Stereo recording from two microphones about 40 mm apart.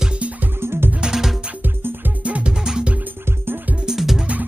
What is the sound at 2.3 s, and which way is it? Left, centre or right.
Music, right.